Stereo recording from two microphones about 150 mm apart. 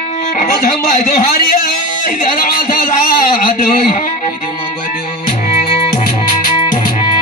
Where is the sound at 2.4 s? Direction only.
70° left (ahead or behind).